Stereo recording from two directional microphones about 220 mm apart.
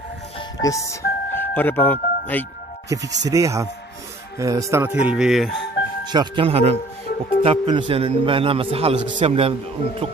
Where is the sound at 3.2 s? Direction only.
15° right (ahead or behind).